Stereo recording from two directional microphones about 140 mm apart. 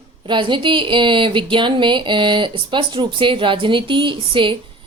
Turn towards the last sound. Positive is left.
turn(degrees=-35)  # may be behind; listen again after turning